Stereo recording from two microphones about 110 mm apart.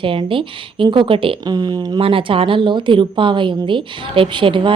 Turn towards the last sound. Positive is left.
turn(degrees=-50)  # may be behind; listen again after turning